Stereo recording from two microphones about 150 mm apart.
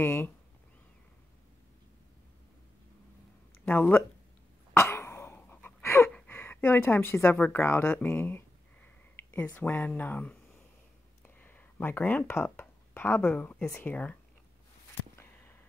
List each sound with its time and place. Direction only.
0.0 s speech: 15° left (ahead or behind)
3.6 s speech: 10° left (ahead or behind)
4.7 s cough: 15° left (ahead or behind)
6.1 s a woman's voice: 15° left (ahead or behind)
11.2 s a sound: 10° left (ahead or behind)
13.7 s speech: 15° left (ahead or behind)